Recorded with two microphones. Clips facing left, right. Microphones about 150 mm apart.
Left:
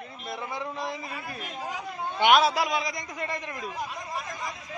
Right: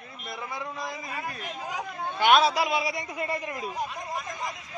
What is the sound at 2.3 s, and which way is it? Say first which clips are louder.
A man's voice: even; centre (ahead or behind).